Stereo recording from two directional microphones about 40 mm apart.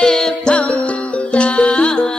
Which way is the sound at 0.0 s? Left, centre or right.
Centre.